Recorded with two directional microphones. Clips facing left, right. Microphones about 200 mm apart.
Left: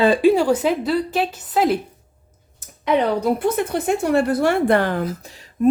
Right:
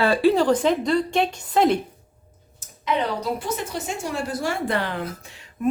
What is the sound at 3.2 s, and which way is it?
A woman's voice, 55° left (ahead or behind).